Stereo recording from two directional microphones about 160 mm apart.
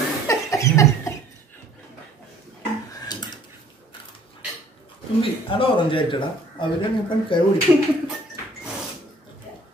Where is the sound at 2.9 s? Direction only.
25° left (ahead or behind).